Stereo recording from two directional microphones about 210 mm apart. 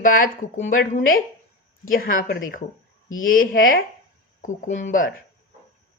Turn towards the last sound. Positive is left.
turn(degrees=40)  # may be behind; listen again after turning